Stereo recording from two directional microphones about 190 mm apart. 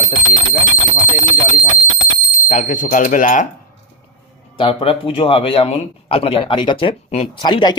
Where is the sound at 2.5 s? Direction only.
40° left (ahead or behind).